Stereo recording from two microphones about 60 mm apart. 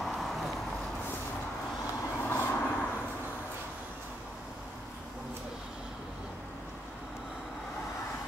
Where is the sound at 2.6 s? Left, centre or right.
Left.